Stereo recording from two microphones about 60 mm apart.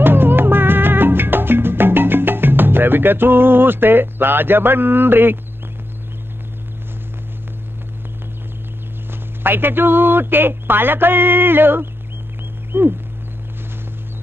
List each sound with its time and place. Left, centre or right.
0.0 s music: right
9.4 s speech: right